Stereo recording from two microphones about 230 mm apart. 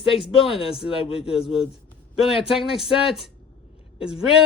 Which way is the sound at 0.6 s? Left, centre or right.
Centre.